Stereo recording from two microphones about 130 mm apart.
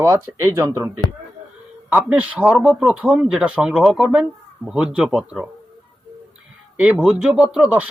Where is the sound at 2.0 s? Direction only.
10° right (ahead or behind).